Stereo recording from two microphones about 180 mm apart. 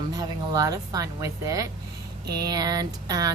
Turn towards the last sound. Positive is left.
turn(degrees=-20)  # may be behind; listen again after turning